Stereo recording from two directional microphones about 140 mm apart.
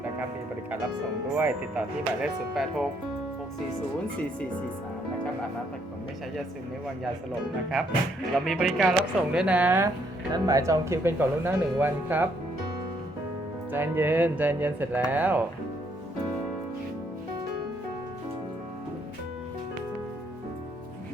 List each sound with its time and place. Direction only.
1.4 s speech: 10° right (ahead or behind)
8.3 s speech: centre (ahead or behind)
10.3 s speech: 25° right (ahead or behind)
13.7 s speech: 15° right (ahead or behind)